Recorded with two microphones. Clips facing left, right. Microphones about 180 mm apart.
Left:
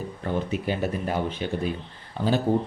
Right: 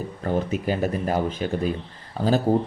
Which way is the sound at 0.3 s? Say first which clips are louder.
Right 3 dB; 40° right (ahead or behind).